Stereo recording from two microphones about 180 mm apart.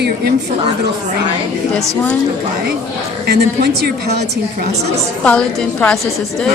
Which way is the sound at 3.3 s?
65° right (ahead or behind).